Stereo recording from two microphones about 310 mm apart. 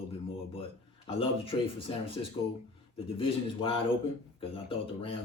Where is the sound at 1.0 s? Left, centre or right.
Centre.